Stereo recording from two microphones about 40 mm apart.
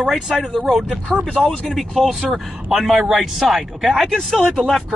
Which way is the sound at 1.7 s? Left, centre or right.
Centre.